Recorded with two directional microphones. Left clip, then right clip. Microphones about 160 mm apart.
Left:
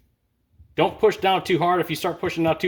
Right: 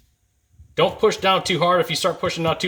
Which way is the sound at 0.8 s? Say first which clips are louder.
Right 1 dB; 40° left (ahead or behind).